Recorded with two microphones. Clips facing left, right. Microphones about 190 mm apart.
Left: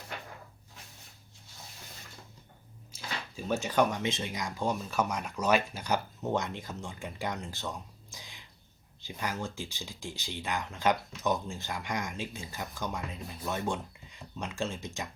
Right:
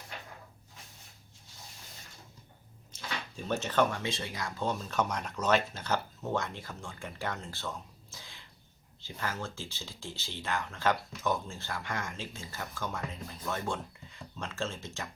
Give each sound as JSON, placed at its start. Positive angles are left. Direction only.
{"t": 2.9, "sound": "speech", "side_deg": 10}